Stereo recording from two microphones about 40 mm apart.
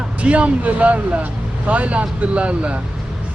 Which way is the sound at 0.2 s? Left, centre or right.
Right.